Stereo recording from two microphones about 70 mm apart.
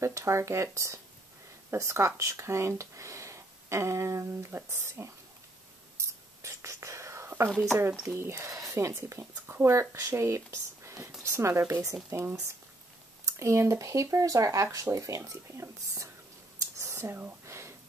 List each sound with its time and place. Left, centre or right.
0.0 s speech: right
5.9 s whispering: right
7.7 s speech: right
16.7 s a sound: right